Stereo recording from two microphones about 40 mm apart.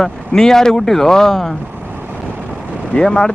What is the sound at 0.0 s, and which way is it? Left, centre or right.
Speech, centre.